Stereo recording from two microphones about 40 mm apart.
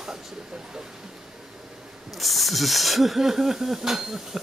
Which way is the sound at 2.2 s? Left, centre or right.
Centre.